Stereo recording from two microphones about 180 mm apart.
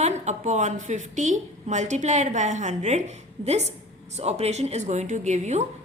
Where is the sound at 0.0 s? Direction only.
40° right (ahead or behind).